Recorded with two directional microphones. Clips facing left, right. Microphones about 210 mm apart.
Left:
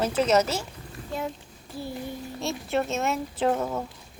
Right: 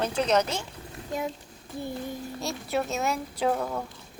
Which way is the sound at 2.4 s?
Centre (ahead or behind).